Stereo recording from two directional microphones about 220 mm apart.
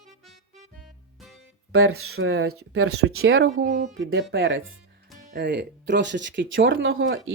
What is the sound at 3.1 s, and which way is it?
Speech, 70° right (ahead or behind).